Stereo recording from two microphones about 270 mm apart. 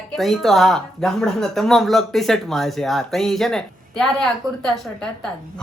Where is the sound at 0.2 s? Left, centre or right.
Centre.